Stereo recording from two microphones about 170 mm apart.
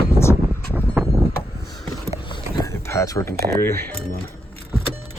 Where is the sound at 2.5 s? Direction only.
20° left (ahead or behind).